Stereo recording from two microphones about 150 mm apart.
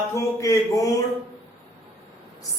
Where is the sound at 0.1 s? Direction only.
20° left (ahead or behind).